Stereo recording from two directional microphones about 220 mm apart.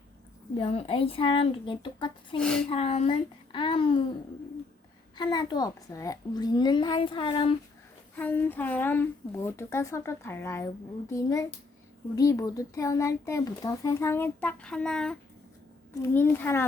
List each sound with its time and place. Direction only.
0.5 s a child's voice: 25° left (ahead or behind)
2.4 s speech: 5° left (ahead or behind)
2.6 s a child's voice: 25° left (ahead or behind)
5.1 s a child's voice: 20° left (ahead or behind)
8.1 s speech: 10° left (ahead or behind)